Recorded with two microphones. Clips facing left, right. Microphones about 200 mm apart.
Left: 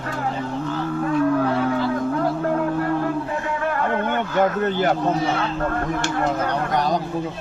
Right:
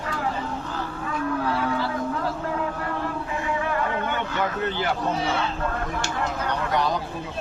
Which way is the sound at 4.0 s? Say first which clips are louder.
Left 6 dB; 50° left (ahead or behind).